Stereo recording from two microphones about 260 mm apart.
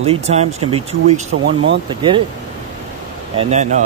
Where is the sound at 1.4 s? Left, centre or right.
Right.